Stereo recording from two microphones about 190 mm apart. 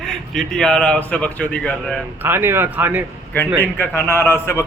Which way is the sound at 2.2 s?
10° right (ahead or behind).